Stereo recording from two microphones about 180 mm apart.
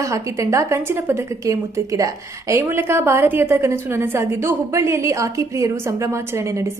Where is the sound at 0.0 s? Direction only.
15° right (ahead or behind).